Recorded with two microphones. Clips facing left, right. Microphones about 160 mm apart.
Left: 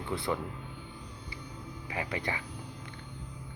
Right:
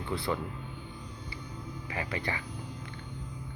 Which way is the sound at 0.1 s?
20° left (ahead or behind).